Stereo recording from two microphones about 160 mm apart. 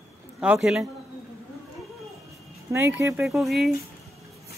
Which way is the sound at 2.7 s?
20° right (ahead or behind).